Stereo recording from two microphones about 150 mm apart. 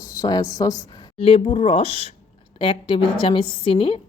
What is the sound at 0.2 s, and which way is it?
Speech, 25° left (ahead or behind).